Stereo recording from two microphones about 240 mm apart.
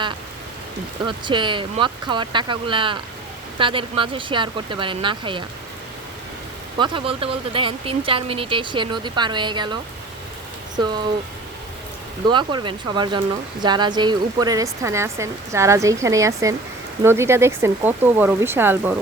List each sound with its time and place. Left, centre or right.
1.0 s speech: centre
6.7 s speech: centre
10.8 s speech: centre
12.3 s speech: centre